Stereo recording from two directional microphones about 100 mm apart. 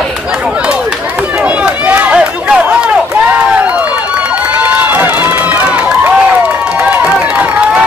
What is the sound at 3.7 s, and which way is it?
Run, 10° right (ahead or behind).